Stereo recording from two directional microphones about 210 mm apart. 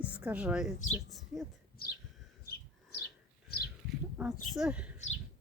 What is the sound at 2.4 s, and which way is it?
Bird, 50° left (ahead or behind).